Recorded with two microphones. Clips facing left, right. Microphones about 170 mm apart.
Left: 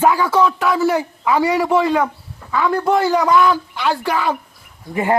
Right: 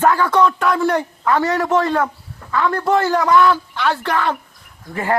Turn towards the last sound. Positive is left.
turn(degrees=20)  # may be behind; listen again after turning